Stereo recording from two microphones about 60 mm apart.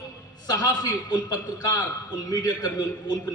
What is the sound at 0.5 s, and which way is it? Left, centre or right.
A man's voice, left.